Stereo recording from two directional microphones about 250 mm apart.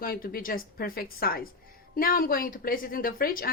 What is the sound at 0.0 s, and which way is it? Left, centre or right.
A woman's voice, left.